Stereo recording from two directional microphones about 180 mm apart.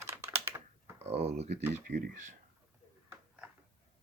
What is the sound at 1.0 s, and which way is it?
Speech, 35° right (ahead or behind).